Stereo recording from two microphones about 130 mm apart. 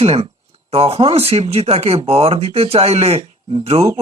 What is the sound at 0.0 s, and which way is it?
Speech, 55° right (ahead or behind).